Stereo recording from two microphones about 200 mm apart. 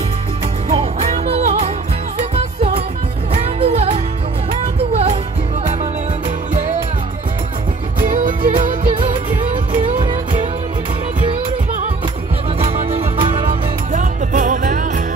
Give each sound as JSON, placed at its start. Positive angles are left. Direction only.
{"t": 0.7, "sound": "music", "side_deg": -30}
{"t": 3.5, "sound": "music", "side_deg": -30}
{"t": 8.0, "sound": "music", "side_deg": -40}
{"t": 8.9, "sound": "music", "side_deg": -25}
{"t": 12.5, "sound": "music", "side_deg": -30}
{"t": 13.5, "sound": "music", "side_deg": -40}